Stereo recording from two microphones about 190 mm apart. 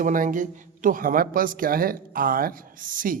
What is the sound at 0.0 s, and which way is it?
Speech, 45° right (ahead or behind).